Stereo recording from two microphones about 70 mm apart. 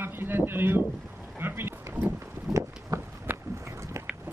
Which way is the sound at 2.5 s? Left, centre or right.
Centre.